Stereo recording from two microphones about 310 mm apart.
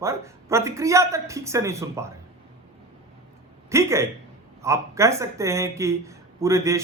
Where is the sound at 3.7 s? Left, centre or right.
Centre.